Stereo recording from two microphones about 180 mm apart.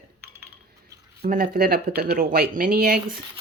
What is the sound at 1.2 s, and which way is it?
Speech, 55° right (ahead or behind).